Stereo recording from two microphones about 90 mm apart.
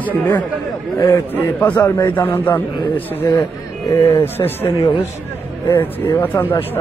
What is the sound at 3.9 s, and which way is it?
Speech, 35° left (ahead or behind).